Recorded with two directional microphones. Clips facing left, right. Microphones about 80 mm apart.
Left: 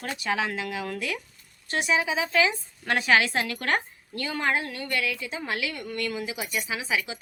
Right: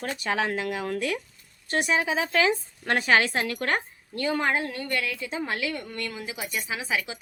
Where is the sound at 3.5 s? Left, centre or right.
Right.